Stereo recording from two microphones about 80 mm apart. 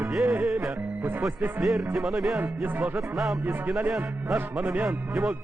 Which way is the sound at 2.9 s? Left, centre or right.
Centre.